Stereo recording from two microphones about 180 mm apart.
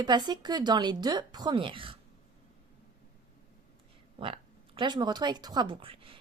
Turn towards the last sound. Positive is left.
turn(degrees=-30)  # may be behind; listen again after turning